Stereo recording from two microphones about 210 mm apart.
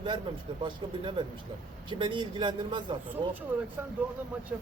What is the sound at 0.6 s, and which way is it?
Speech, 25° right (ahead or behind).